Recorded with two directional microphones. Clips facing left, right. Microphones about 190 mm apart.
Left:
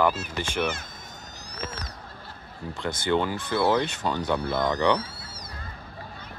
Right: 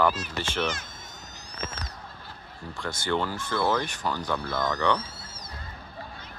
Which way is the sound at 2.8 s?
20° left (ahead or behind).